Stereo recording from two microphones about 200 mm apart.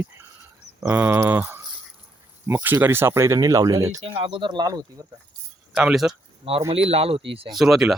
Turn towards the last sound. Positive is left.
turn(degrees=0)  # may be behind; listen again after turning